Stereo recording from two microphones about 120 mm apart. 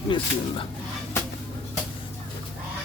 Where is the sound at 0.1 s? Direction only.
45° left (ahead or behind).